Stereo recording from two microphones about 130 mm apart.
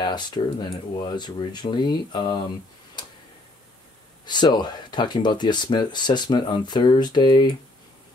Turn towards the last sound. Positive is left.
turn(degrees=35)  # may be behind; listen again after turning